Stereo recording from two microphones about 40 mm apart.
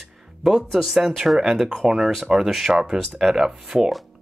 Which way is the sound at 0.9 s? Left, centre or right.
Centre.